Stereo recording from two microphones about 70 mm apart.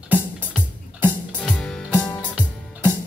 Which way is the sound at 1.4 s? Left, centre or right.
Centre.